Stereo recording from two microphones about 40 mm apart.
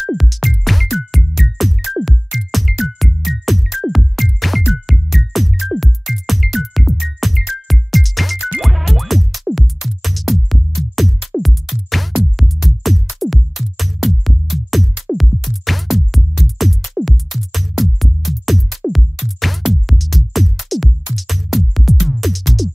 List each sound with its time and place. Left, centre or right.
0.0 s music: centre